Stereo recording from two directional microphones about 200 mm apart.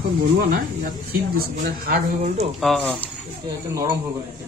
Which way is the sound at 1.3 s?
50° right (ahead or behind).